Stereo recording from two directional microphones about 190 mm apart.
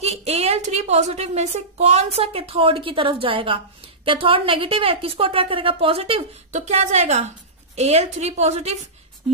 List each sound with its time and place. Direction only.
0.0 s a woman's voice: 35° right (ahead or behind)